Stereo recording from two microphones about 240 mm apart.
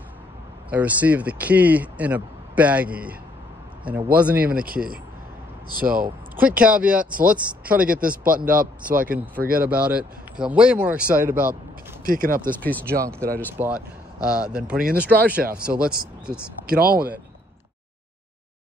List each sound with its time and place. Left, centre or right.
0.7 s speech: centre
4.6 s speech: right
6.4 s speech: centre
8.0 s speech: right
9.0 s speech: centre
12.1 s speech: right
12.4 s speech: centre
13.0 s speech: centre
16.6 s speech: right